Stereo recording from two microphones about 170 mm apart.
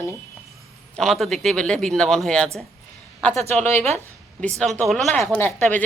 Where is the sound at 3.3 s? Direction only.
40° right (ahead or behind).